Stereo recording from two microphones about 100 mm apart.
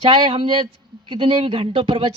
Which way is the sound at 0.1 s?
60° right (ahead or behind).